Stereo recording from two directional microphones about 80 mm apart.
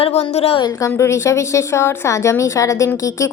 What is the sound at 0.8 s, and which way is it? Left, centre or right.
A woman's voice, left.